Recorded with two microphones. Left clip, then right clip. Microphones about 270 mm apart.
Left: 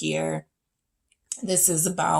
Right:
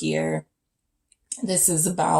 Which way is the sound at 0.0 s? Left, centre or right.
Left.